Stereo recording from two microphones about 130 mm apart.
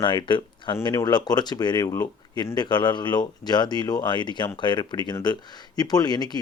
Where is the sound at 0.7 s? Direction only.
25° left (ahead or behind).